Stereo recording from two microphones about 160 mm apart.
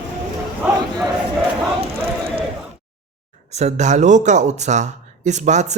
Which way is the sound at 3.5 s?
45° right (ahead or behind).